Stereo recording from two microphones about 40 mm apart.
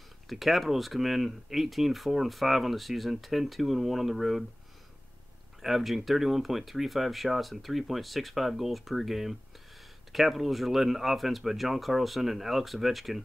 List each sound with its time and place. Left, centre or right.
0.3 s speech: centre
5.6 s speech: centre